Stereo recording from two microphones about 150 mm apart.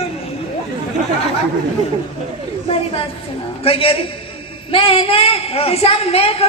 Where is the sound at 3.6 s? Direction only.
35° left (ahead or behind).